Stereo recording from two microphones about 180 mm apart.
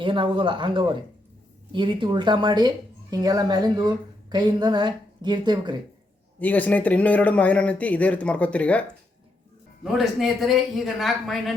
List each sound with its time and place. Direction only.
0.0 s speech: 30° right (ahead or behind)
6.4 s a man's voice: 10° left (ahead or behind)
9.8 s speech: centre (ahead or behind)